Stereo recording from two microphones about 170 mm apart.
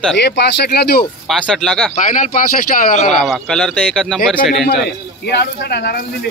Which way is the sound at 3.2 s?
5° left (ahead or behind).